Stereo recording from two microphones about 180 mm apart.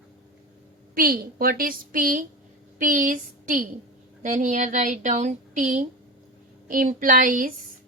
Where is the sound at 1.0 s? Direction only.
55° right (ahead or behind).